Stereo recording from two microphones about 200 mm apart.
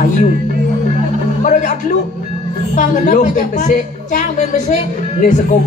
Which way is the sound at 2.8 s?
40° left (ahead or behind).